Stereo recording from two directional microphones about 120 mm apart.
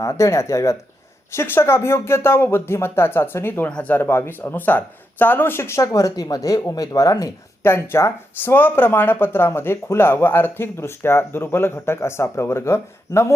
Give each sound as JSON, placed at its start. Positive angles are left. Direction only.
{"t": 0.0, "sound": "speech", "side_deg": 25}